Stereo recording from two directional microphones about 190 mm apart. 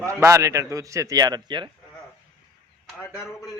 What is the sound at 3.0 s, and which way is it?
Speech, 15° left (ahead or behind).